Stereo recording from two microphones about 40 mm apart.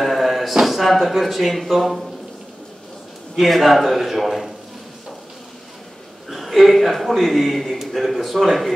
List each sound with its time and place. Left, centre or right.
0.0 s a sound: centre
1.7 s speech: centre
3.3 s speech: centre
6.2 s a man's voice: centre